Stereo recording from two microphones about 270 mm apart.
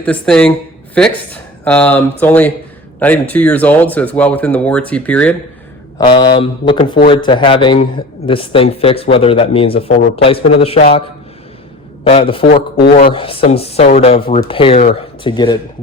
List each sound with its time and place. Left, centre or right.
0.0 s speech: centre
6.0 s speech: centre
12.0 s speech: left
12.5 s speech: left
13.1 s speech: centre